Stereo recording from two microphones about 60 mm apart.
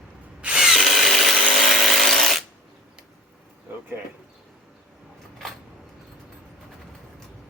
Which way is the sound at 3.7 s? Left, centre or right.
Right.